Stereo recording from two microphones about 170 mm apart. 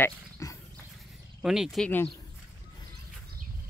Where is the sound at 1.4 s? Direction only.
5° right (ahead or behind).